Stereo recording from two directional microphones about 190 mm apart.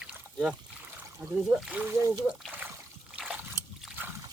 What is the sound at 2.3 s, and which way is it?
Splash, 10° right (ahead or behind).